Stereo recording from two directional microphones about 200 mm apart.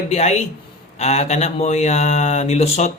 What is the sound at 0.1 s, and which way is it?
Speech, 30° left (ahead or behind).